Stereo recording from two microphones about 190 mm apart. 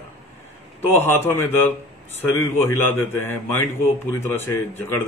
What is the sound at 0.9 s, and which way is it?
A man's voice, 10° left (ahead or behind).